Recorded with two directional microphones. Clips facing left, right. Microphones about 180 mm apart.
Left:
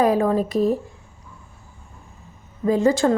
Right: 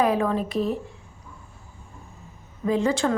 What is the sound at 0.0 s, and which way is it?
Speech, 40° left (ahead or behind).